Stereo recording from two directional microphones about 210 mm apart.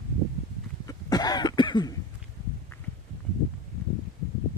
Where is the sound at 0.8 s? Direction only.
20° left (ahead or behind).